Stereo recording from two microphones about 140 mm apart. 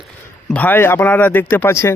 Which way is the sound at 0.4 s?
10° left (ahead or behind).